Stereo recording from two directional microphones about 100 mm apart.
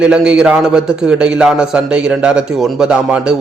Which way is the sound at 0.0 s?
10° right (ahead or behind).